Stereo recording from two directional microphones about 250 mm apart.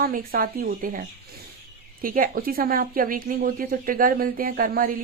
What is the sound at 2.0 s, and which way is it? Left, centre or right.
A woman's voice, right.